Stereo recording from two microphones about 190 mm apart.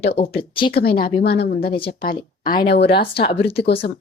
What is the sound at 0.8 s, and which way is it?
Speech, 55° left (ahead or behind).